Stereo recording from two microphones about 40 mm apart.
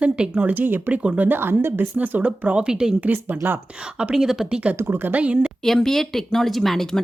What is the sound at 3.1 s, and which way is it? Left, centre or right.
Speech, right.